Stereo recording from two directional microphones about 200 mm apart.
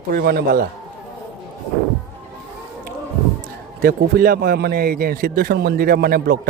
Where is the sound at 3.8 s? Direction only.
50° right (ahead or behind).